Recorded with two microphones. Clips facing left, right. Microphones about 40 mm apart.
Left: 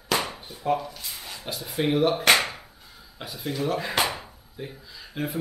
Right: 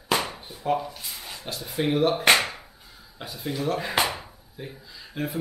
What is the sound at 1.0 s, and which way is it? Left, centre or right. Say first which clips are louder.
Speech: even; centre.